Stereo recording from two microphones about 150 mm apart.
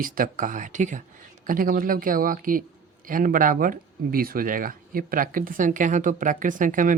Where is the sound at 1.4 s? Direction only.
70° right (ahead or behind).